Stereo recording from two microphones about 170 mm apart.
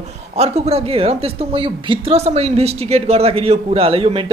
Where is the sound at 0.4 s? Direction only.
35° right (ahead or behind).